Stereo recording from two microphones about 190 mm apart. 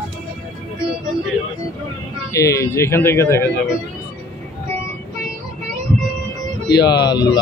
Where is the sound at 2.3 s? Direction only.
15° left (ahead or behind).